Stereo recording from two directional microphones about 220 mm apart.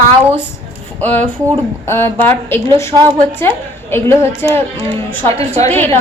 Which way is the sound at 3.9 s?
10° left (ahead or behind).